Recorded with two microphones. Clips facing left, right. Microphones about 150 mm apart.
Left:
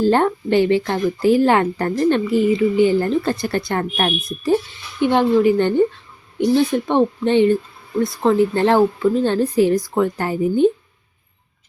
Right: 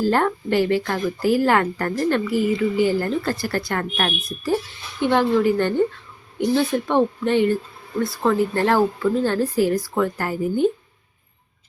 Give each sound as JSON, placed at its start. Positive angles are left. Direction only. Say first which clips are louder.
{"t": 0.0, "sound": "speech", "louder": "left 4 dB", "side_deg": 25}